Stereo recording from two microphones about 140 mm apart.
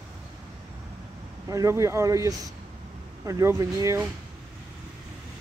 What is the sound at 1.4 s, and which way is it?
Speech, 20° right (ahead or behind).